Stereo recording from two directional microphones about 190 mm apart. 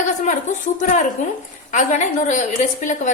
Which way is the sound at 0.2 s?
40° left (ahead or behind).